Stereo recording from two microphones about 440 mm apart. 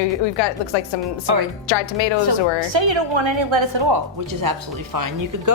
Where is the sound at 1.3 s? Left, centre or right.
Right.